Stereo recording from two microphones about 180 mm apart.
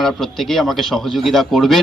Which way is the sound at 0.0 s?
Centre (ahead or behind).